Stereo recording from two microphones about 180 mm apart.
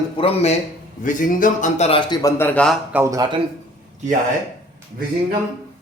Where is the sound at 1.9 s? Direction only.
25° left (ahead or behind).